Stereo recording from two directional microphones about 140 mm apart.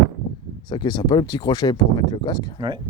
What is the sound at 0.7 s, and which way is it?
Speech, 30° left (ahead or behind).